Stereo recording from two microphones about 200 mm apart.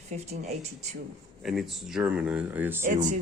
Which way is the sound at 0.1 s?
35° right (ahead or behind).